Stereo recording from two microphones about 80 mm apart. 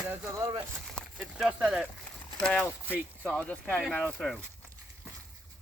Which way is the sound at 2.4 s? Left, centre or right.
Centre.